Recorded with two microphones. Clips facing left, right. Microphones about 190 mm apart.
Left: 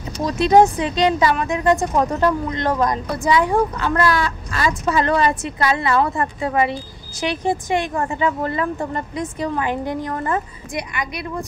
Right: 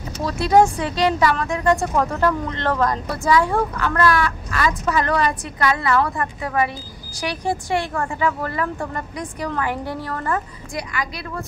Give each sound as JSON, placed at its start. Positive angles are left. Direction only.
{"t": 0.2, "sound": "speech", "side_deg": 20}